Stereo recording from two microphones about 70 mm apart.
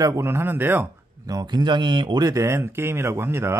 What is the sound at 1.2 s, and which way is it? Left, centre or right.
Speech, right.